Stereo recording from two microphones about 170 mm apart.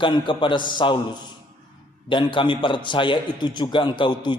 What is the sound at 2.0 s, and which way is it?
A man's voice, 30° left (ahead or behind).